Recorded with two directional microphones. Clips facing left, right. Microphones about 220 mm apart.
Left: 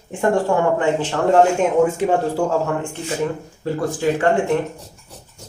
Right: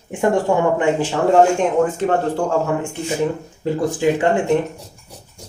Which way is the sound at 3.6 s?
15° right (ahead or behind).